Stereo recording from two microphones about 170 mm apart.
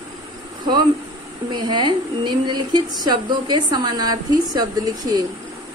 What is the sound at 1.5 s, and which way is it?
A woman's voice, 25° right (ahead or behind).